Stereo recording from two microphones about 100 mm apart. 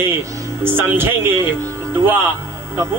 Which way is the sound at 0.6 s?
20° right (ahead or behind).